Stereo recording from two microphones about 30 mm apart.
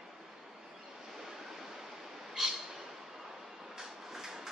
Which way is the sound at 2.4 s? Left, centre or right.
Centre.